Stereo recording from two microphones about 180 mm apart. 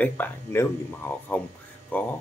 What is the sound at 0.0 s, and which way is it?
Speech, 10° left (ahead or behind).